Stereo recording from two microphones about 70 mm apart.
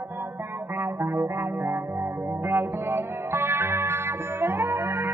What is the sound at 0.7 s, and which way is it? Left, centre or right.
Music, right.